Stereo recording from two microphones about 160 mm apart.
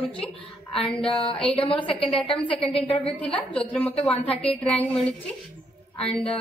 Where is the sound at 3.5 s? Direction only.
5° left (ahead or behind).